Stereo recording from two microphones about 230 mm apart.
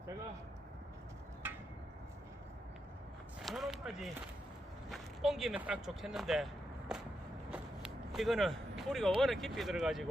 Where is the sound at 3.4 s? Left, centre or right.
Centre.